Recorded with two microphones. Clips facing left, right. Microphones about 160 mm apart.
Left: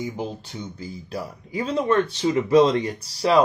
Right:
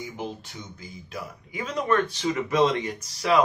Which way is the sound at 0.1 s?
35° left (ahead or behind).